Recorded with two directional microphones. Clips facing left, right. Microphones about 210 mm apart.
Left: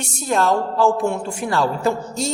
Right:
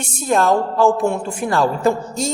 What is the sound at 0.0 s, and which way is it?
A man's voice, 50° right (ahead or behind).